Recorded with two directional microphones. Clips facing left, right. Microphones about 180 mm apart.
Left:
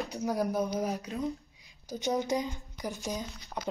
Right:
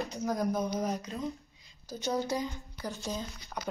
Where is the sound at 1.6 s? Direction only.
15° left (ahead or behind).